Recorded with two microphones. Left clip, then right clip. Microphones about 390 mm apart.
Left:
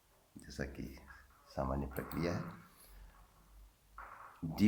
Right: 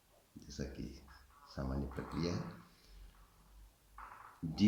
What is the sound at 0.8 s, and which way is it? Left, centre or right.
Speech, centre.